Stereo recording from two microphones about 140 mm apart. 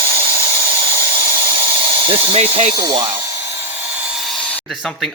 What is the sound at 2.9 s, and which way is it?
Speech, 35° right (ahead or behind).